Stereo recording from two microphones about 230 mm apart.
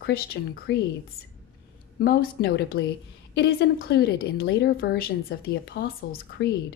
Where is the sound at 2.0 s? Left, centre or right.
Left.